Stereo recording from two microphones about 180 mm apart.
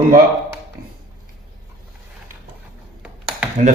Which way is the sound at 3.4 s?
5° right (ahead or behind).